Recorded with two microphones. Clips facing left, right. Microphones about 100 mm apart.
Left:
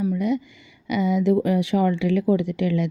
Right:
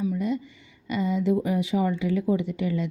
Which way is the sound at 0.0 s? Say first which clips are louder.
Left 4 dB; 70° left (ahead or behind).